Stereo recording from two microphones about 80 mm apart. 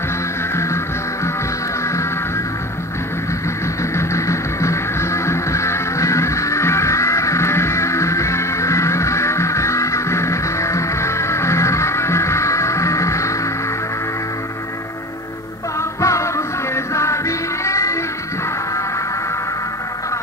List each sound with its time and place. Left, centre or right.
1.9 s music: left
3.9 s music: left
16.0 s music: left